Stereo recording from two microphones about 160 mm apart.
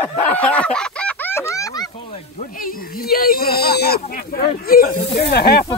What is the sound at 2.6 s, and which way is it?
Speech, 65° left (ahead or behind).